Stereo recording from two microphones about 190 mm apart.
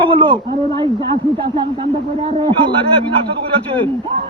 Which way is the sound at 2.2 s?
25° right (ahead or behind).